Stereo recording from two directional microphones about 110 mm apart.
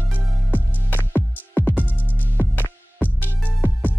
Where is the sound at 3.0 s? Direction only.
15° left (ahead or behind).